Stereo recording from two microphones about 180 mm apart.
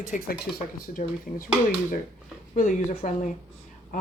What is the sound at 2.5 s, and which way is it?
Speech, 40° left (ahead or behind).